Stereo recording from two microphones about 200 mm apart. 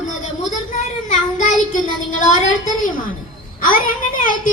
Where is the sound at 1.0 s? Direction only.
40° left (ahead or behind).